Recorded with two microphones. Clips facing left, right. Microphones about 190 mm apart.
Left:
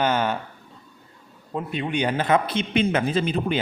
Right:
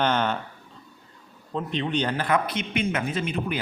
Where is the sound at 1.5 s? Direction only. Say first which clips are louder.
Even; 10° left (ahead or behind); by 3.6 s 30° left (ahead or behind).